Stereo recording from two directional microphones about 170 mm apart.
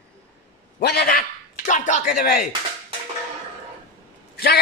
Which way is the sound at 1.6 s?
45° left (ahead or behind).